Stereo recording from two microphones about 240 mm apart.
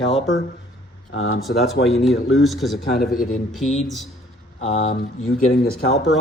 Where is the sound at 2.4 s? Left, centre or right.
Centre.